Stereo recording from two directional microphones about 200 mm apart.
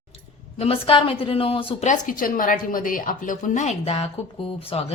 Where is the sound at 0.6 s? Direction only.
30° left (ahead or behind).